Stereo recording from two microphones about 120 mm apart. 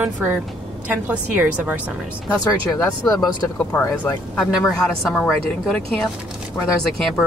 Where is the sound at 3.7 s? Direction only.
20° left (ahead or behind).